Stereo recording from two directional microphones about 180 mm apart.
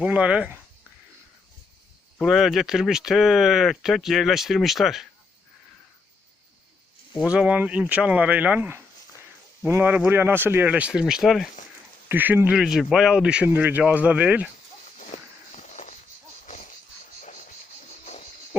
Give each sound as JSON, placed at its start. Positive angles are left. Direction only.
{"t": 0.0, "sound": "speech", "side_deg": -5}
{"t": 2.1, "sound": "speech", "side_deg": 0}
{"t": 7.2, "sound": "speech", "side_deg": -5}
{"t": 15.1, "sound": "walk", "side_deg": 45}
{"t": 15.5, "sound": "a sound", "side_deg": 40}
{"t": 17.2, "sound": "a sound", "side_deg": 45}